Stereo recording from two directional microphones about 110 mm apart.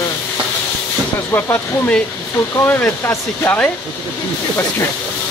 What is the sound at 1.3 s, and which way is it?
Speech, 20° left (ahead or behind).